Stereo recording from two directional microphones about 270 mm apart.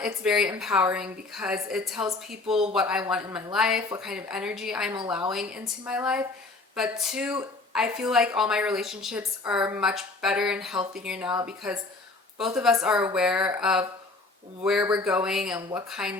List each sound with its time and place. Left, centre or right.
0.0 s a woman's voice: centre